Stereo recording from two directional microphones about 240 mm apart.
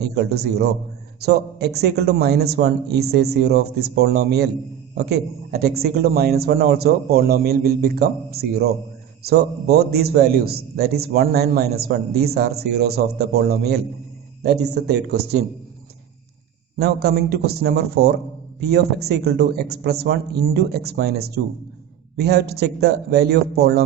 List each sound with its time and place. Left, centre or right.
0.0 s a man's voice: right
16.7 s a man's voice: right